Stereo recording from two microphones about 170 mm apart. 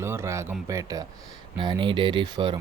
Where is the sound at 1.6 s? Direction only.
25° right (ahead or behind).